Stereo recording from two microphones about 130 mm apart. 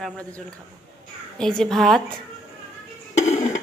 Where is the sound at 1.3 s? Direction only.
5° left (ahead or behind).